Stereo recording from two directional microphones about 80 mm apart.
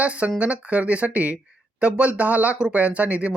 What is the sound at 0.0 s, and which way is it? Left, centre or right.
A man's voice, centre.